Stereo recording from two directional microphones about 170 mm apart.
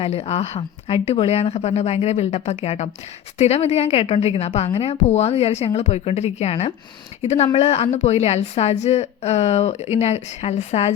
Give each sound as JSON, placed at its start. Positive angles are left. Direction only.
{"t": 0.0, "sound": "speech", "side_deg": 40}